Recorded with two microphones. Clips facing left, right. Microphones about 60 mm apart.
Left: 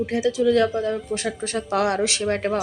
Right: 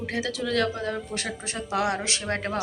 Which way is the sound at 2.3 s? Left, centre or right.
Left.